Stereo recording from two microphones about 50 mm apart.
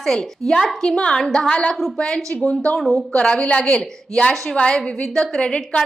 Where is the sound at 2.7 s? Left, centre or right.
Centre.